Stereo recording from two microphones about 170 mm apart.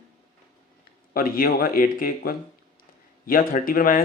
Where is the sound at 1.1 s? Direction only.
60° left (ahead or behind).